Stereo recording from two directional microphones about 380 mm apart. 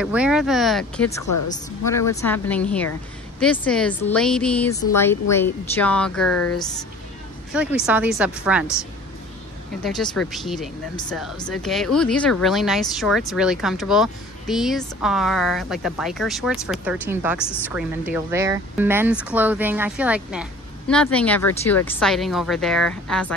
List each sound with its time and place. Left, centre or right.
0.0 s speech: centre
1.2 s a woman's voice: left
1.9 s speech: centre
6.3 s a woman's voice: left
7.5 s speech: centre
9.8 s speech: centre